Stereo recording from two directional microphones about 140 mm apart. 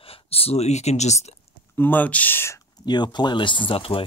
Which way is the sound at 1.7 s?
15° left (ahead or behind).